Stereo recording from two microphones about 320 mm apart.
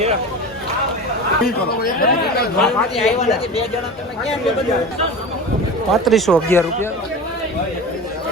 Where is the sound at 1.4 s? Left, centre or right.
Left.